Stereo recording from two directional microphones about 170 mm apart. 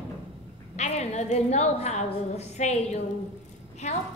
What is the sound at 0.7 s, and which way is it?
A woman's voice, 40° left (ahead or behind).